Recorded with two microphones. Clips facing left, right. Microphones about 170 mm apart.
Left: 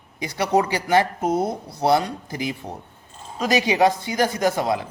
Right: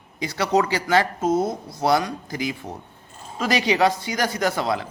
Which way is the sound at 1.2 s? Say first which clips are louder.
Right 1 dB; 60° left (ahead or behind).